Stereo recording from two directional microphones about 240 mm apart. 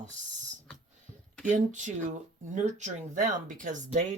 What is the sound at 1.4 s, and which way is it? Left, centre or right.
Speech, right.